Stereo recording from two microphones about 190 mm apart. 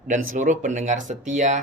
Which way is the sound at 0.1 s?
40° right (ahead or behind).